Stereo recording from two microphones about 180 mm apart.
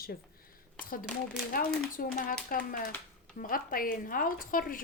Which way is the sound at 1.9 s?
50° left (ahead or behind).